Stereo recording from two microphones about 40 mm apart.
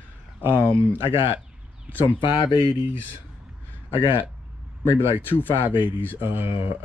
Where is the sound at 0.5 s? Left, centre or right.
Left.